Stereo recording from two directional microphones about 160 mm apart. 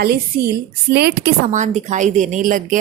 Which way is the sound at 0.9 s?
90° right.